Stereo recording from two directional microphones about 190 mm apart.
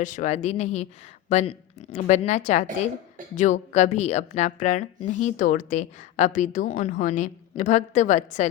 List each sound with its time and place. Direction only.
0.0 s a woman's voice: 40° left (ahead or behind)